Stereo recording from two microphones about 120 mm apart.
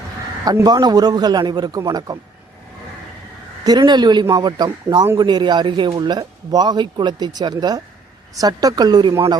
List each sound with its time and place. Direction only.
0.6 s speech: 35° right (ahead or behind)
3.6 s speech: 35° right (ahead or behind)